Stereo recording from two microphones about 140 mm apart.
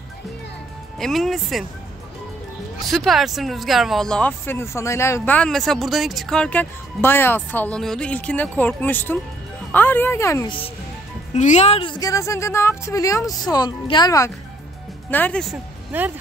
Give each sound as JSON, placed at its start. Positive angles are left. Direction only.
{"t": 0.9, "sound": "speech", "side_deg": 0}
{"t": 2.8, "sound": "speech", "side_deg": 0}
{"t": 11.3, "sound": "a woman's voice", "side_deg": 55}
{"t": 12.0, "sound": "a woman's voice", "side_deg": 20}
{"t": 15.0, "sound": "speech", "side_deg": 10}
{"t": 15.5, "sound": "speech", "side_deg": -15}